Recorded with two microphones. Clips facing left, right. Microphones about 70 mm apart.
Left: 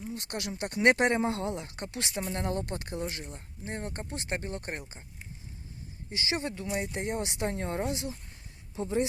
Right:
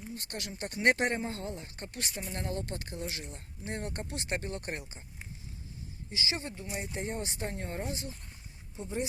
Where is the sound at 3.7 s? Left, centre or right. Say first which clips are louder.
Left 1 dB; left.